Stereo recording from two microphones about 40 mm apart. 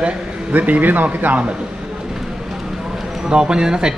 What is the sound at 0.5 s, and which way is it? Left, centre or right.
Speech, right.